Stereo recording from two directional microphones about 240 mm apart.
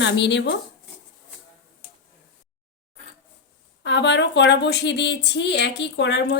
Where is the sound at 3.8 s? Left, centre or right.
Left.